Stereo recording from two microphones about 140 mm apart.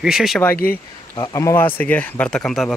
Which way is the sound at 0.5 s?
90° left.